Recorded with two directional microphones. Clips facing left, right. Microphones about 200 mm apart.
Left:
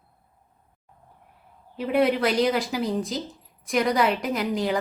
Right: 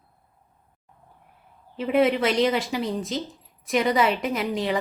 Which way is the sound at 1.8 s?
Centre (ahead or behind).